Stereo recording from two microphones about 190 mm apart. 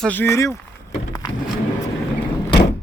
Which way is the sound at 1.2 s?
20° left (ahead or behind).